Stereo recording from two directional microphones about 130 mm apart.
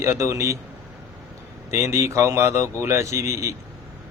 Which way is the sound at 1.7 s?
20° right (ahead or behind).